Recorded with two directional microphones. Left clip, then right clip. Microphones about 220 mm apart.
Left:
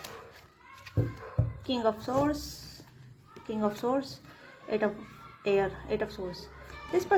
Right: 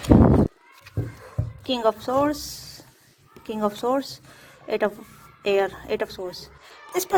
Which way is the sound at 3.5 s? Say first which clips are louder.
Right 6 dB; 40° right (ahead or behind).